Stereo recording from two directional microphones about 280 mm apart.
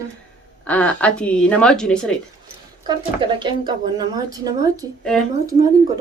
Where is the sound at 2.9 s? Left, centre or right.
Centre.